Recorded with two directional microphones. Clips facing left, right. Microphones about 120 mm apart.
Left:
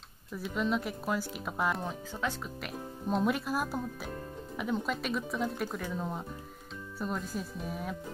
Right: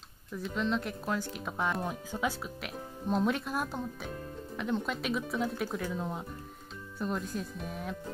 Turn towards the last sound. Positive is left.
turn(degrees=0)  # may be behind; listen again after turning